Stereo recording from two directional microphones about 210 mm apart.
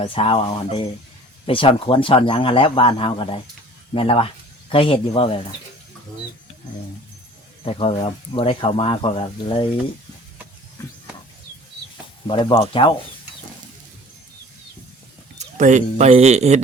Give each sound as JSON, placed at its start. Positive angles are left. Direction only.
{"t": 0.0, "sound": "speech", "side_deg": 25}
{"t": 7.6, "sound": "speech", "side_deg": 30}
{"t": 12.3, "sound": "speech", "side_deg": 25}
{"t": 15.4, "sound": "speech", "side_deg": -35}